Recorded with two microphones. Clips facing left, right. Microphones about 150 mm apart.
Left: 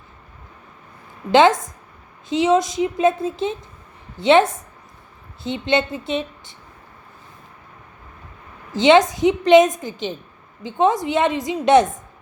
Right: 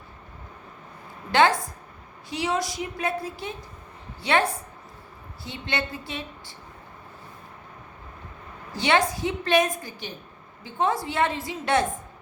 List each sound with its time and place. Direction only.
1.3 s a woman's voice: 20° left (ahead or behind)
8.7 s a woman's voice: 20° left (ahead or behind)